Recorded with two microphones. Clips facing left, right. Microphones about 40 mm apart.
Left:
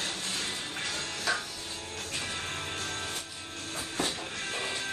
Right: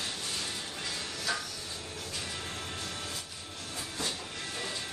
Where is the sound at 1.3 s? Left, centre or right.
Left.